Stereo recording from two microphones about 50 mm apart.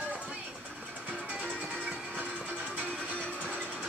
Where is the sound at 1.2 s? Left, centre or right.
Right.